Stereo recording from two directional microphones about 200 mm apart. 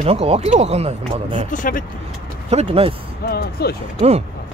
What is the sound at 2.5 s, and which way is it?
Speech, 30° right (ahead or behind).